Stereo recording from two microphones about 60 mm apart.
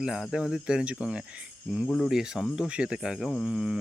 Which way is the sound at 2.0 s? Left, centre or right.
Centre.